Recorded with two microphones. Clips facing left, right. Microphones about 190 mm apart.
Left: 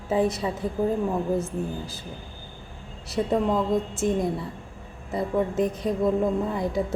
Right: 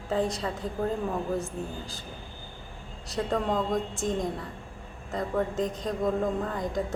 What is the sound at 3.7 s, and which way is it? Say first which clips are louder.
A woman's voice: left 5 dB; 5° left (ahead or behind).